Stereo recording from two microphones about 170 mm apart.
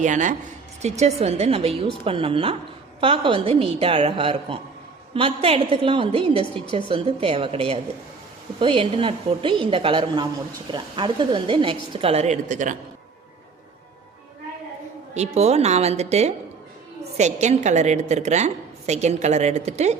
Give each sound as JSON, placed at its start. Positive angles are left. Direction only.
{"t": 0.0, "sound": "a woman's voice", "side_deg": -45}
{"t": 15.1, "sound": "a woman's voice", "side_deg": -40}